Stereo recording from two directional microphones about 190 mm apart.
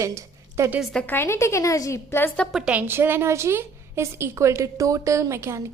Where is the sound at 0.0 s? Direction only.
15° right (ahead or behind).